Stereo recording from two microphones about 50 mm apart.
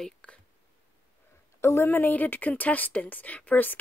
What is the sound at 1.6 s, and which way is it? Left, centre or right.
Speech, left.